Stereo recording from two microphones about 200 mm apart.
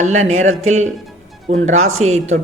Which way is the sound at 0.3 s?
35° right (ahead or behind).